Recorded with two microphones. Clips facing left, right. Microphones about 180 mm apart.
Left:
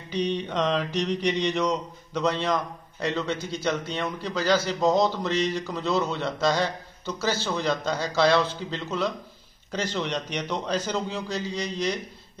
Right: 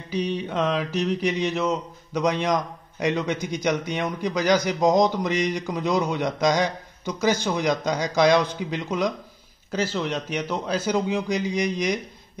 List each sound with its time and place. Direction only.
0.1 s mantra: 5° right (ahead or behind)